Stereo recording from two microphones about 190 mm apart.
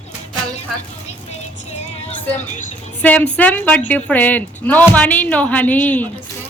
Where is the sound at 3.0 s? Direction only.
10° left (ahead or behind).